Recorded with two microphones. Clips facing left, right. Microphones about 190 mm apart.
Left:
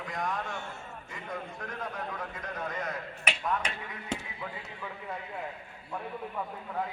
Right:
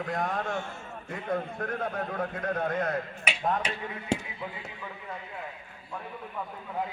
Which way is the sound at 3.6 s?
30° right (ahead or behind).